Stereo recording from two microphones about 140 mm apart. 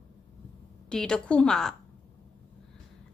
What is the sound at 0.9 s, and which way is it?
Speech, 5° left (ahead or behind).